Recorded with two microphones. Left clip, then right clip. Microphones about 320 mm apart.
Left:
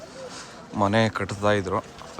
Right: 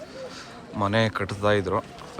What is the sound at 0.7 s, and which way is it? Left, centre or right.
Speech, centre.